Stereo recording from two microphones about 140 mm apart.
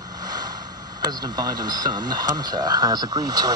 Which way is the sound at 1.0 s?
30° right (ahead or behind).